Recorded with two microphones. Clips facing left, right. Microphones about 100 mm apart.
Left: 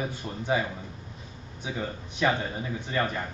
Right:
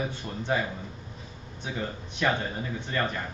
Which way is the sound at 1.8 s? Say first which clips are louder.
Left 2 dB; 10° left (ahead or behind).